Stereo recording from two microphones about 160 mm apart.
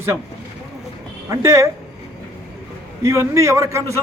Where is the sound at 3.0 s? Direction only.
20° right (ahead or behind).